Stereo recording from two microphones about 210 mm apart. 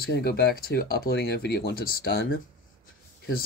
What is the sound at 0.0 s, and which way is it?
Speech, 50° left (ahead or behind).